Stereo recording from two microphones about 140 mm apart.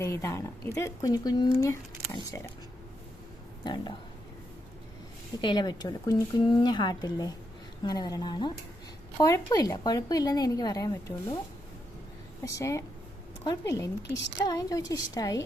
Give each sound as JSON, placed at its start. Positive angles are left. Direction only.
{"t": 0.0, "sound": "speech", "side_deg": 20}
{"t": 3.6, "sound": "a woman's voice", "side_deg": 30}
{"t": 5.4, "sound": "a woman's voice", "side_deg": 30}
{"t": 12.5, "sound": "speech", "side_deg": 20}